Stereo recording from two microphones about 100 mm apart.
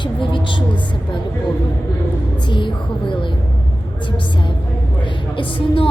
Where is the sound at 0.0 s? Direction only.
55° left (ahead or behind).